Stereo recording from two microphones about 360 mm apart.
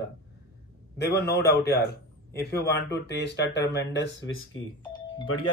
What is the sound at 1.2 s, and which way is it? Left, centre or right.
Speech, left.